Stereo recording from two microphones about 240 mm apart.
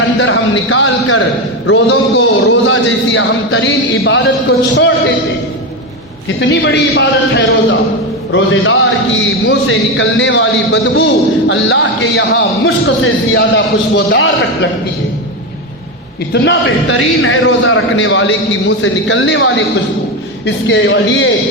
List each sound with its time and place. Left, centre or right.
0.2 s a man's voice: left
1.9 s speech: left
6.2 s a man's voice: left
16.3 s speech: left
16.6 s a man's voice: left